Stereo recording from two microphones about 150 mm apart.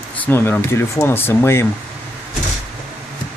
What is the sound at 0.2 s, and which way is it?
Speech, 15° left (ahead or behind).